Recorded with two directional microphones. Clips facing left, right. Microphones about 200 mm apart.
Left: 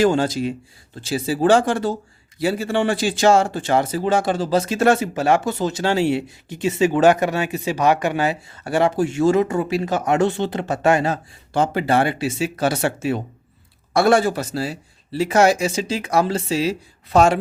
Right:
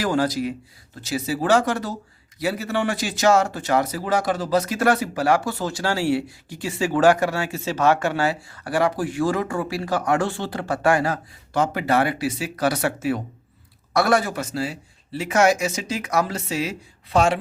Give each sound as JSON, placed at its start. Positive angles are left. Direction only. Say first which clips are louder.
{"t": 0.0, "sound": "a man's voice", "louder": "left 4 dB", "side_deg": 25}
{"t": 17.1, "sound": "speech", "louder": "left 4 dB", "side_deg": 45}